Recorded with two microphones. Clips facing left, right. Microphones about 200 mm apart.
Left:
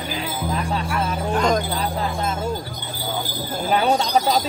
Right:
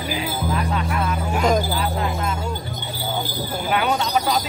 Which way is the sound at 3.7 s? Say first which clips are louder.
Left 3 dB; 30° left (ahead or behind).